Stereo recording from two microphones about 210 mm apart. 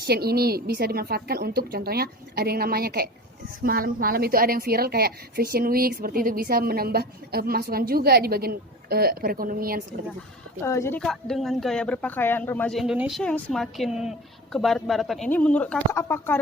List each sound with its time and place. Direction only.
0.0 s a woman's voice: 50° right (ahead or behind)
10.6 s a woman's voice: 10° left (ahead or behind)